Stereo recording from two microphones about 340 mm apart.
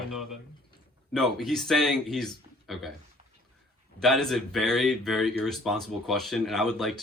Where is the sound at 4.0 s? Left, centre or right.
Centre.